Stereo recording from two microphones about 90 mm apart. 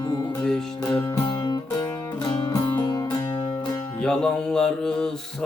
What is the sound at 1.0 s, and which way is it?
Music, 45° left (ahead or behind).